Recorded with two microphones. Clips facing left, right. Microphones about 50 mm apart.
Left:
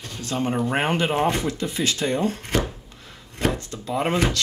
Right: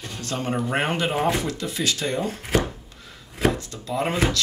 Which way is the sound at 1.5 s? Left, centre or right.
Left.